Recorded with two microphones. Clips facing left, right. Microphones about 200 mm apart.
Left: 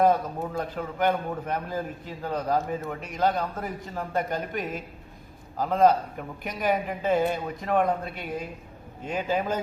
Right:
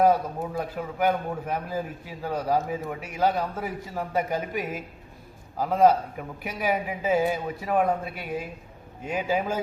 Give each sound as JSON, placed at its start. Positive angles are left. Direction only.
{"t": 0.0, "sound": "a man's voice", "side_deg": -10}